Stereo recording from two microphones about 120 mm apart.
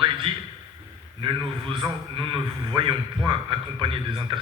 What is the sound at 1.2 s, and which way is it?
A man's voice, 40° right (ahead or behind).